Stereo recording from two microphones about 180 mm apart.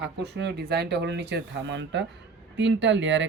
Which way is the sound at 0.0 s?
70° right (ahead or behind).